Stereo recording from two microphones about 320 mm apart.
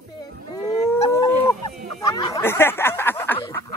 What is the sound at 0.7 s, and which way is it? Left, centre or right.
Howl, centre.